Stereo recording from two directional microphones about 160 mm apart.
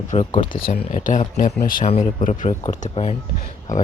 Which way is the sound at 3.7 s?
55° left (ahead or behind).